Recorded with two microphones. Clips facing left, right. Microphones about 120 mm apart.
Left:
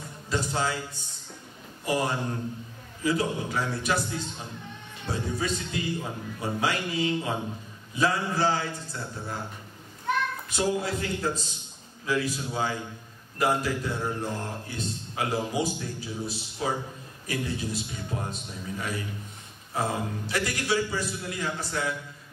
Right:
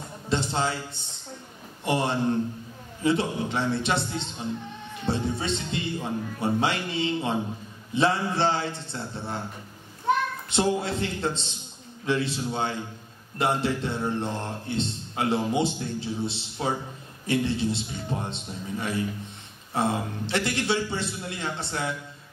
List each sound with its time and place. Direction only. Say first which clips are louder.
0.3 s a man's voice: right 2 dB; 25° right (ahead or behind)